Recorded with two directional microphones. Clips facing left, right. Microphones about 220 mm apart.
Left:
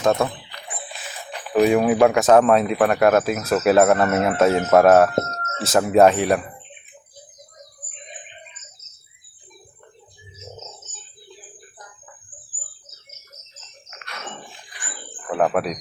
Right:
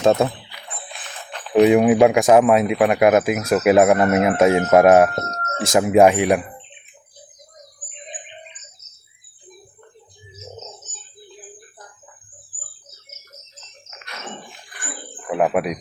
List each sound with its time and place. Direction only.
0.0 s speech: 20° right (ahead or behind)
1.0 s music: 10° left (ahead or behind)
1.5 s speech: 20° right (ahead or behind)
15.3 s cricket: 10° right (ahead or behind)